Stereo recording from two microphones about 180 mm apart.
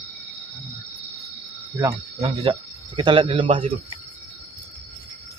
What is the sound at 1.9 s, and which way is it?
A man's voice, 30° right (ahead or behind).